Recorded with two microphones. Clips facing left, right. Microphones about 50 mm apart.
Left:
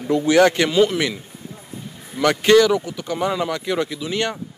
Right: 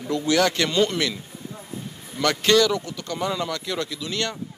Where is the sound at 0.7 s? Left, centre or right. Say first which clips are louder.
Left 4 dB; centre.